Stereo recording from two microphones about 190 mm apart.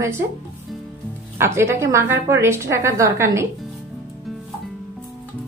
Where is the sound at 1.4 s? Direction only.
15° right (ahead or behind).